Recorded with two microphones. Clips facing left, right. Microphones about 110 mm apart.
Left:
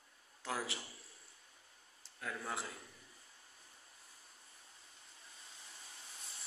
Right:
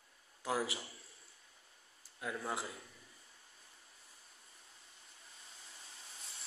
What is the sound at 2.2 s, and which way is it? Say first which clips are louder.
Speech: right 2 dB; 15° right (ahead or behind).